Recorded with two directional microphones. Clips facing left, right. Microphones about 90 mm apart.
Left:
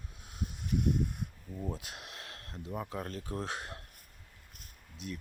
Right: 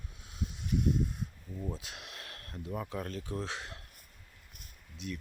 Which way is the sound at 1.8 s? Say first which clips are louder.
Even; 40° left (ahead or behind).